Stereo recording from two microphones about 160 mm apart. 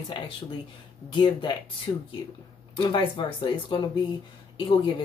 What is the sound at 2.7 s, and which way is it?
Speech, 30° left (ahead or behind).